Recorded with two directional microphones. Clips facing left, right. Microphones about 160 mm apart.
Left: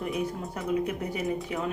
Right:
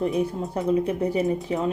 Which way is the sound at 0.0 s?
30° right (ahead or behind).